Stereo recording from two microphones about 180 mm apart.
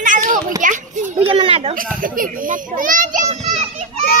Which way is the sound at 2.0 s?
50° right (ahead or behind).